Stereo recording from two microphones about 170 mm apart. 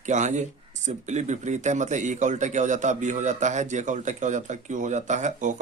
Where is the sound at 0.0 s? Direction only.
45° right (ahead or behind).